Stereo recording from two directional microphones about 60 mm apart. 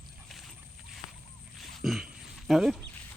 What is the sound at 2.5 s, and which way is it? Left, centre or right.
Speech, centre.